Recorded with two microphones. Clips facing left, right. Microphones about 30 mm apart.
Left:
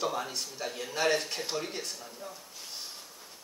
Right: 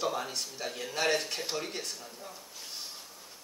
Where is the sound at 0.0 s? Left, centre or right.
Centre.